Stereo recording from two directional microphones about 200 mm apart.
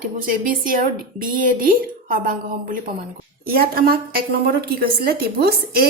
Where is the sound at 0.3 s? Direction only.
45° right (ahead or behind).